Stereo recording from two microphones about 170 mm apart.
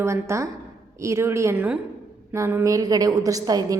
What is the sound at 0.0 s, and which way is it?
A woman's voice, 15° right (ahead or behind).